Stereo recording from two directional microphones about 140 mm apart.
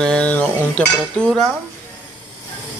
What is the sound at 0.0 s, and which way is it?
Speech, 10° left (ahead or behind).